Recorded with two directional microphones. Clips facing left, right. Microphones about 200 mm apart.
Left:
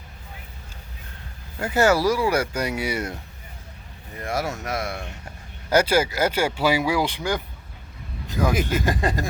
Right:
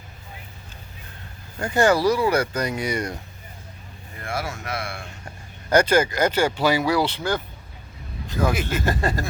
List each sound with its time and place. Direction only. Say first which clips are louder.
1.5 s speech: even; 5° left (ahead or behind)
4.2 s speech: left 3 dB; 40° left (ahead or behind)
5.6 s speech: right 1 dB; 5° left (ahead or behind)
8.6 s speech: left 1 dB; 15° left (ahead or behind)